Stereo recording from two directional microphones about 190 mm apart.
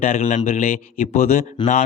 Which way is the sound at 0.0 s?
40° left (ahead or behind).